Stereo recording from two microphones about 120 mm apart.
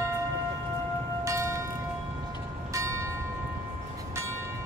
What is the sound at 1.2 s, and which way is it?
Music, 25° right (ahead or behind).